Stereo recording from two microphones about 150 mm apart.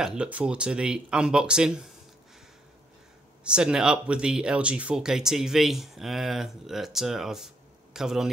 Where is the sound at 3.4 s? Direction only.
5° right (ahead or behind).